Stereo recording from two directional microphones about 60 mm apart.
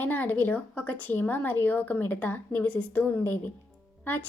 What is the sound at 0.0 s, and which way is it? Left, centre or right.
Speech, left.